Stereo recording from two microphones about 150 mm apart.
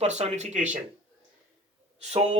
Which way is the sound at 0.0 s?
50° right (ahead or behind).